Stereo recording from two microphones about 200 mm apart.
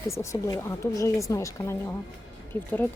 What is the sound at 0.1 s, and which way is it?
A woman's voice, 15° left (ahead or behind).